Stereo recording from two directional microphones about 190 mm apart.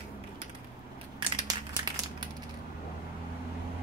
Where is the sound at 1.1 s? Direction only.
20° right (ahead or behind).